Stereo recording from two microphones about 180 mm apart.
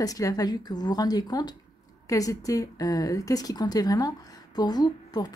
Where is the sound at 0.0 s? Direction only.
20° left (ahead or behind).